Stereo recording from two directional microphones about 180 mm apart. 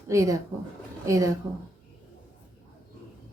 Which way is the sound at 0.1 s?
20° right (ahead or behind).